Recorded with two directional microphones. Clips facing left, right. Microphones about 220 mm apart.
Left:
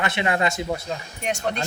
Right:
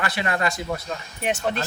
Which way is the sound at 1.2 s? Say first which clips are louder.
Right 2 dB; 5° right (ahead or behind).